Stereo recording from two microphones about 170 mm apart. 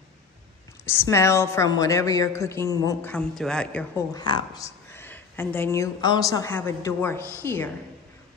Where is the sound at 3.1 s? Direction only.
5° left (ahead or behind).